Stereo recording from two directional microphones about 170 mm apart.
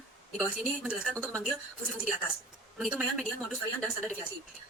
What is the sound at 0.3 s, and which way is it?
Speech, 5° right (ahead or behind).